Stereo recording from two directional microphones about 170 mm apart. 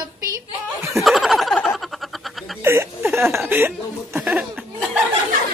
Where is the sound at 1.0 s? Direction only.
Centre (ahead or behind).